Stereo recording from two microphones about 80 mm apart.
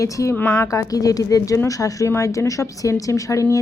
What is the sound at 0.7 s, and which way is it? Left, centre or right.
A woman's voice, left.